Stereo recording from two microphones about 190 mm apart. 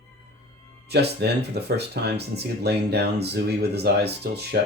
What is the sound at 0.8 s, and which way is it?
A man's voice, 60° right (ahead or behind).